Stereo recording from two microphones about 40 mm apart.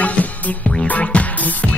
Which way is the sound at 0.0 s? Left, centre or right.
Left.